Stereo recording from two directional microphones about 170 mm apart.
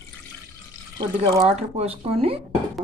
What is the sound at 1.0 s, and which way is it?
Speech, 20° right (ahead or behind).